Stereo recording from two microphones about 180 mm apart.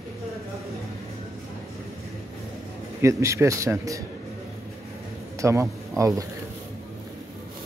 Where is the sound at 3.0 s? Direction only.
15° right (ahead or behind).